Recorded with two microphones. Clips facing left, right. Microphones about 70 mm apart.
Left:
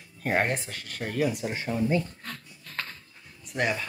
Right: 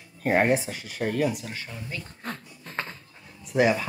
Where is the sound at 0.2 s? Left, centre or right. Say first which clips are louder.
Right 5 dB; centre.